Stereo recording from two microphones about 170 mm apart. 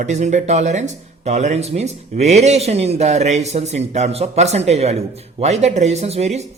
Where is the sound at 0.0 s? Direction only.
45° right (ahead or behind).